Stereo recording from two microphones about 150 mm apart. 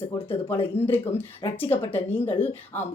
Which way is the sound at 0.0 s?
15° left (ahead or behind).